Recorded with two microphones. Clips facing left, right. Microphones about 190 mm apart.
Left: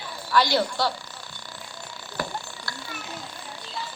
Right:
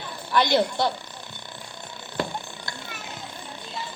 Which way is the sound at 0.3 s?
20° right (ahead or behind).